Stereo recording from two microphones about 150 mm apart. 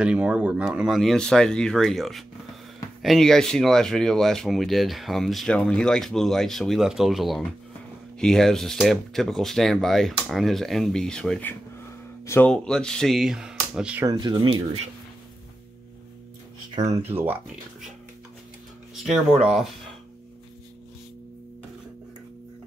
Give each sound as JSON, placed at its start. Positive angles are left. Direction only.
{"t": 0.0, "sound": "speech", "side_deg": -5}
{"t": 14.0, "sound": "speech", "side_deg": -30}
{"t": 16.9, "sound": "speech", "side_deg": -15}
{"t": 19.0, "sound": "speech", "side_deg": -5}